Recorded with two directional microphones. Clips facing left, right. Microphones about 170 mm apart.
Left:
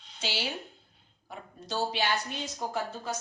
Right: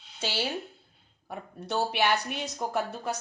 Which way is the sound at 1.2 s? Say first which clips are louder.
Right 4 dB; 60° right (ahead or behind).